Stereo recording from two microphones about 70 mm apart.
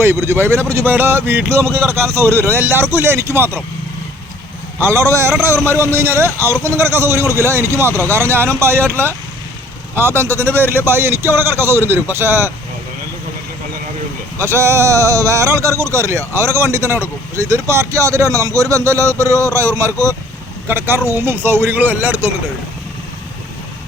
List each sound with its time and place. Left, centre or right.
0.0 s a man's voice: right
4.8 s a man's voice: right
14.3 s speech: right
20.7 s a man's voice: right